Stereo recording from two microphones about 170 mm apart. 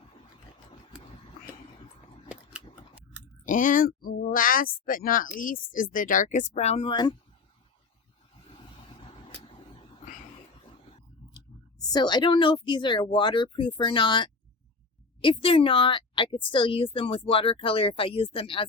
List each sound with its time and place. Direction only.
2.3 s scissors: 5° right (ahead or behind)
3.4 s speech: 50° left (ahead or behind); by 7.2 s 25° left (ahead or behind)
11.9 s a woman's voice: 25° left (ahead or behind)